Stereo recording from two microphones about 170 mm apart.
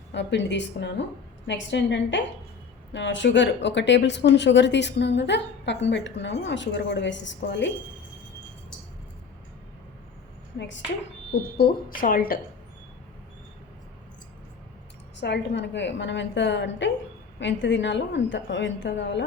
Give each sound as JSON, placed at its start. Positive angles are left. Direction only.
{"t": 0.1, "sound": "speech", "side_deg": 90}
{"t": 11.5, "sound": "a woman's voice", "side_deg": 60}
{"t": 15.2, "sound": "speech", "side_deg": 90}